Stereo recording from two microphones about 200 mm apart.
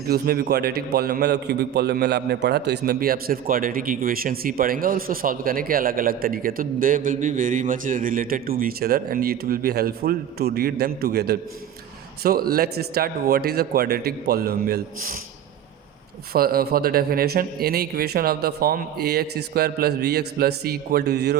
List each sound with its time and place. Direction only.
0.1 s a man's voice: 50° right (ahead or behind)
16.3 s a man's voice: 50° right (ahead or behind)